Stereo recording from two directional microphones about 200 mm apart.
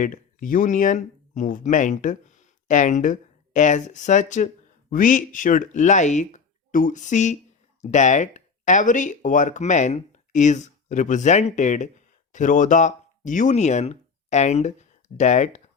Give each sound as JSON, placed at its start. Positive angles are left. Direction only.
{"t": 0.0, "sound": "speech", "side_deg": 40}